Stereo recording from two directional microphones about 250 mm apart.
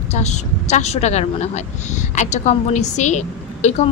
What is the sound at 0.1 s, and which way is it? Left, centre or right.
A woman's voice, left.